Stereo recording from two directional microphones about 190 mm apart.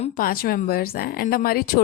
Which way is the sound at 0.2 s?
50° left (ahead or behind).